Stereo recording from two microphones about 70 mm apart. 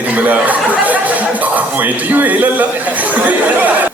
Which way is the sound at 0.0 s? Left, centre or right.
Right.